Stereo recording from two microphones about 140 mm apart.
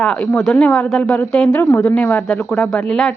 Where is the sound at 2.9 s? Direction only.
5° left (ahead or behind).